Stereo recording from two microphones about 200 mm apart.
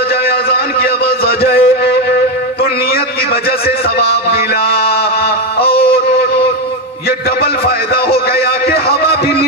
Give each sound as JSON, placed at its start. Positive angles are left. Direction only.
{"t": 1.0, "sound": "music", "side_deg": 50}
{"t": 3.6, "sound": "a man's voice", "side_deg": 50}